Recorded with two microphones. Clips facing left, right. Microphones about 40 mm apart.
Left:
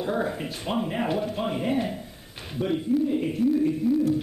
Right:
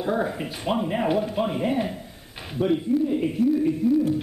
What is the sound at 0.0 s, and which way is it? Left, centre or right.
A man's voice, centre.